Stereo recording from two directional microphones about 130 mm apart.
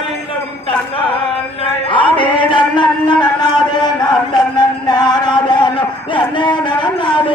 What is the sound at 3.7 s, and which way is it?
Chant, 35° left (ahead or behind).